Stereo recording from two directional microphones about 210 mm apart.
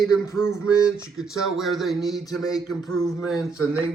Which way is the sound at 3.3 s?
15° left (ahead or behind).